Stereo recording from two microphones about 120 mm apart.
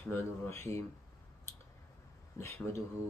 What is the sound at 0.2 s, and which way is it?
Speech, 20° left (ahead or behind).